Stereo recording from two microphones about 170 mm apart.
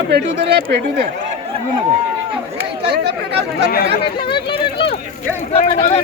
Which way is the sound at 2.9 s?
75° right (ahead or behind).